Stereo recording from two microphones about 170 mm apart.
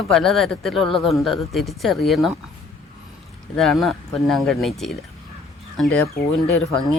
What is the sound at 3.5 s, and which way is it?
Speech, centre (ahead or behind).